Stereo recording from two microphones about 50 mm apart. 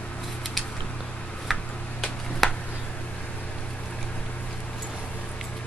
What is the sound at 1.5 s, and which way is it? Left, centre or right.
Tick-tock, centre.